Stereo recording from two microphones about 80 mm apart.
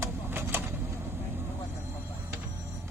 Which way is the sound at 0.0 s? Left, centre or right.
Right.